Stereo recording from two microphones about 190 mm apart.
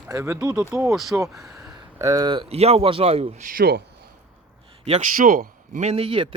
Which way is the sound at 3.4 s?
50° right (ahead or behind).